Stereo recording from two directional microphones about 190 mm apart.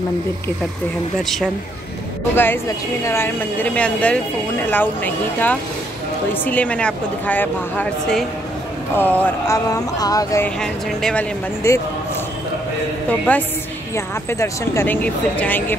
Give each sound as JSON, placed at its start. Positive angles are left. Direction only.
{"t": 2.3, "sound": "a woman's voice", "side_deg": 10}
{"t": 10.6, "sound": "speech", "side_deg": 5}
{"t": 11.6, "sound": "a woman's voice", "side_deg": 15}
{"t": 13.9, "sound": "a woman's voice", "side_deg": 15}